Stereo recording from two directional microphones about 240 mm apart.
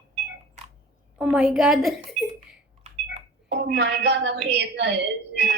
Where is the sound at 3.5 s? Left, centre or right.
Right.